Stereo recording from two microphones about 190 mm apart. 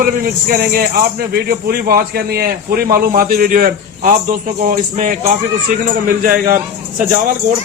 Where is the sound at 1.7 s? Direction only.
55° right (ahead or behind).